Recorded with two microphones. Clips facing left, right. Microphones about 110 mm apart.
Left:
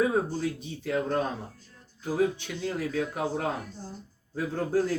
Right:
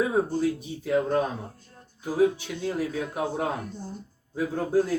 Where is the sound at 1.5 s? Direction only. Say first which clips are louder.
Right 3 dB; 50° right (ahead or behind).